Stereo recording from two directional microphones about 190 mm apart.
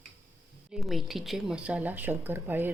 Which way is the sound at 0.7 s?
Centre (ahead or behind).